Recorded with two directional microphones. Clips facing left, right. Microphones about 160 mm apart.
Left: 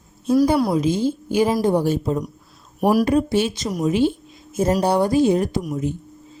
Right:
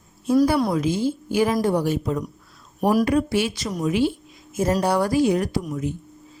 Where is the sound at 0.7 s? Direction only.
20° left (ahead or behind).